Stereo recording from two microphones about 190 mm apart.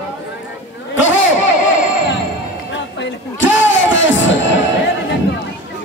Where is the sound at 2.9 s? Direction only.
85° left.